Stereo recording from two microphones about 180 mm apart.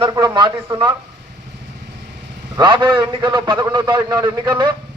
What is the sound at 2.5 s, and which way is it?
Speech, 25° right (ahead or behind).